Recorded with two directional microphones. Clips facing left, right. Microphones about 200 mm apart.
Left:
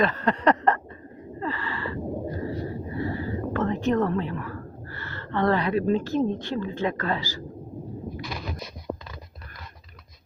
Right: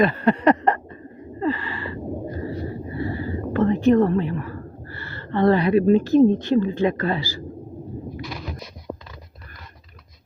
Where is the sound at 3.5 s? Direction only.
10° right (ahead or behind).